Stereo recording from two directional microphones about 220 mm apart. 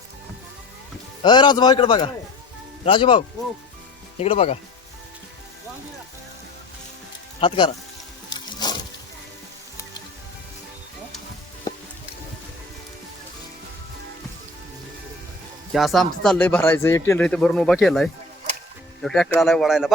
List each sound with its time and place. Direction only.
1.2 s a man's voice: 20° left (ahead or behind)
7.3 s speech: 20° left (ahead or behind)
8.3 s music: 20° left (ahead or behind)
15.7 s speech: centre (ahead or behind)